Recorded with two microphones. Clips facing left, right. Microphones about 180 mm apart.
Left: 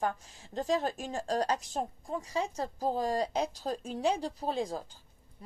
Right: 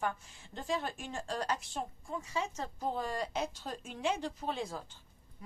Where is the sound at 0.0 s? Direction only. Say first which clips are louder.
Left 3 dB; 35° left (ahead or behind).